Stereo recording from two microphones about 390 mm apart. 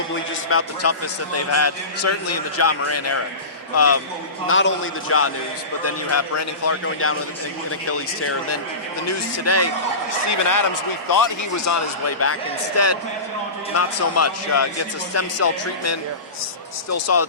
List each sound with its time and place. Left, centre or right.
0.5 s a man's voice: left
10.2 s a man's voice: left